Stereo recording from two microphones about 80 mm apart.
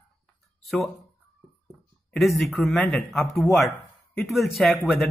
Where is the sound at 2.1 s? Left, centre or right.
Centre.